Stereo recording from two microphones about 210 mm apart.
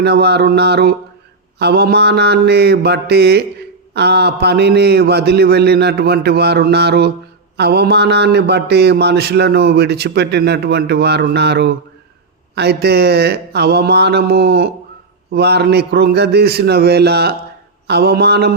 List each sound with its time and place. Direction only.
0.0 s mantra: 50° right (ahead or behind)